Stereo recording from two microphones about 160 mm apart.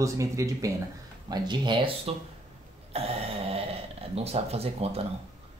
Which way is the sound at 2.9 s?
40° right (ahead or behind).